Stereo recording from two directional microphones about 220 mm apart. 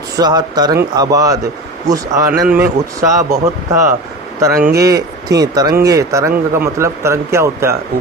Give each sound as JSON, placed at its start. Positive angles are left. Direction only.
{"t": 0.2, "sound": "speech", "side_deg": -20}
{"t": 4.6, "sound": "speech", "side_deg": -45}
{"t": 4.9, "sound": "speech", "side_deg": -15}